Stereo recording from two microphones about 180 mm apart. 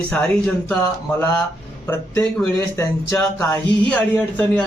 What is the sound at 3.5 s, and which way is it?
Speech, 10° left (ahead or behind).